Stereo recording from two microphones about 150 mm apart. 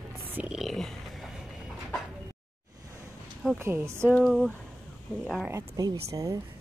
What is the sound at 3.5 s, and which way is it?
Speech, 20° right (ahead or behind).